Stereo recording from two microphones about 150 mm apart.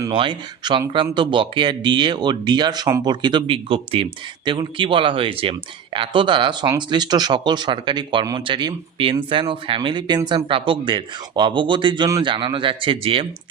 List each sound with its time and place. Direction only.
0.1 s speech: 35° right (ahead or behind)